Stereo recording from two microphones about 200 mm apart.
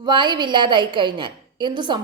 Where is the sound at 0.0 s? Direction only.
25° right (ahead or behind).